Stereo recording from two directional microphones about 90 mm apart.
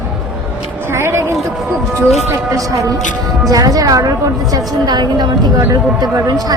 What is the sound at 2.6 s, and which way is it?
A woman's voice, 40° right (ahead or behind).